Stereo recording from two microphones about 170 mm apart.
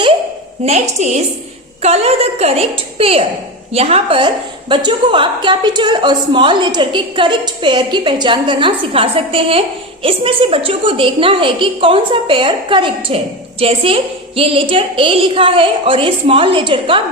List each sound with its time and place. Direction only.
0.6 s a woman's voice: 40° right (ahead or behind)